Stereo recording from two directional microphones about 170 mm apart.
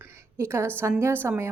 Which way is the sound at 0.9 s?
10° right (ahead or behind).